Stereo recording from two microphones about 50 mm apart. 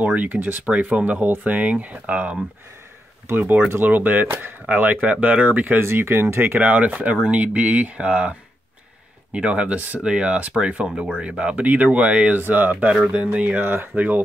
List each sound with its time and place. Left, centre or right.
0.0 s speech: right
3.3 s speech: right
5.9 s speech: right
6.6 s speech: right
11.6 s speech: right
12.4 s speech: right
13.1 s speech: right
13.6 s speech: right
13.9 s speech: right